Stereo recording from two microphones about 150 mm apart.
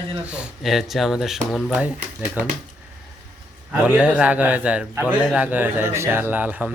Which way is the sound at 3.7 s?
5° right (ahead or behind).